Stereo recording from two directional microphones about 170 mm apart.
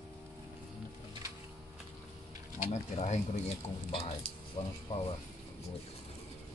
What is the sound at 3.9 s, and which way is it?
Speech, 35° left (ahead or behind).